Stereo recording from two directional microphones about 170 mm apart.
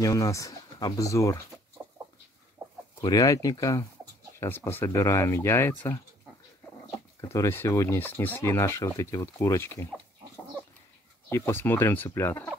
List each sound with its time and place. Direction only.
0.0 s speech: 20° left (ahead or behind)
3.0 s speech: 20° left (ahead or behind)
7.2 s speech: 15° left (ahead or behind)
11.2 s speech: 15° left (ahead or behind)